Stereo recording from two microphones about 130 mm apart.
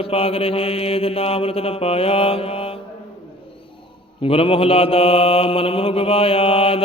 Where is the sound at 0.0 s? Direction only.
50° left (ahead or behind).